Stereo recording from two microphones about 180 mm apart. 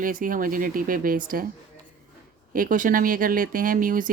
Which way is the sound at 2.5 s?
50° right (ahead or behind).